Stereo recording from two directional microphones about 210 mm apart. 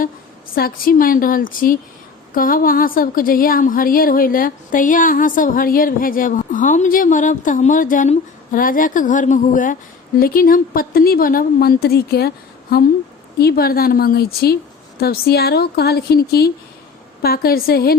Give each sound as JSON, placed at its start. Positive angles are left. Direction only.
{"t": 0.5, "sound": "a woman's voice", "side_deg": 45}
{"t": 13.4, "sound": "speech", "side_deg": 50}